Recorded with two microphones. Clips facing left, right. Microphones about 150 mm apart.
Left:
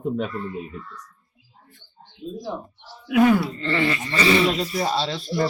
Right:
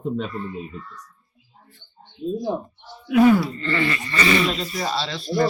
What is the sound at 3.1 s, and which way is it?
Speech, 5° left (ahead or behind).